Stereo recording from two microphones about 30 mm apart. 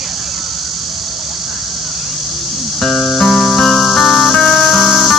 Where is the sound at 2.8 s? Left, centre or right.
Left.